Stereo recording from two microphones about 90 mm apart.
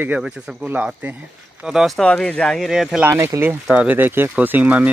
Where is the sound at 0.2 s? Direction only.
5° right (ahead or behind).